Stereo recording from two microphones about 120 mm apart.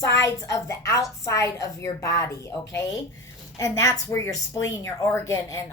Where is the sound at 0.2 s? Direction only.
25° left (ahead or behind).